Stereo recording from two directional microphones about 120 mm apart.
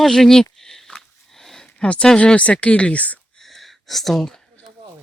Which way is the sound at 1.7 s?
10° left (ahead or behind).